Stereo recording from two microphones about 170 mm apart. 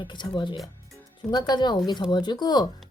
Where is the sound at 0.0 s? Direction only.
25° left (ahead or behind).